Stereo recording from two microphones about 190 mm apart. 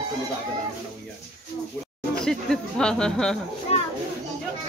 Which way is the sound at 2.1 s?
5° left (ahead or behind).